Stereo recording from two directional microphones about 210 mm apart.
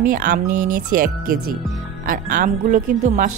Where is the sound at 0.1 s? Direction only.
40° right (ahead or behind).